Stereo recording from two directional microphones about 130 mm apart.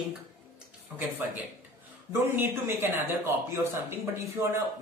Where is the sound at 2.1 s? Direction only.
20° right (ahead or behind).